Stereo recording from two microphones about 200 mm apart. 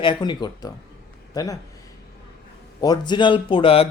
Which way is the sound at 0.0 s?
20° left (ahead or behind).